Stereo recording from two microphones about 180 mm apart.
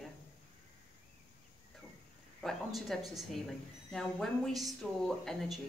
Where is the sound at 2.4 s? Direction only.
Centre (ahead or behind).